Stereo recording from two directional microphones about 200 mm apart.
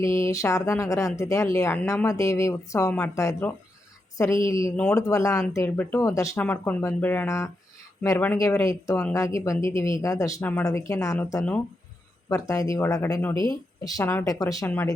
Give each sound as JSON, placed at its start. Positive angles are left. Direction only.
{"t": 0.0, "sound": "speech", "side_deg": 15}
{"t": 13.3, "sound": "speech", "side_deg": -25}
{"t": 13.8, "sound": "speech", "side_deg": 15}